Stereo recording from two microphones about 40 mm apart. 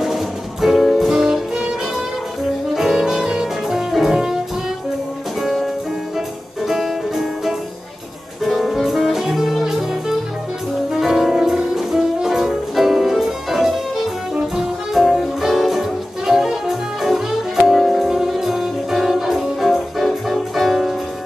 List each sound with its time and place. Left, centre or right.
0.0 s music: centre
2.7 s music: centre
5.4 s music: centre
6.7 s music: centre
14.3 s music: centre
15.0 s music: centre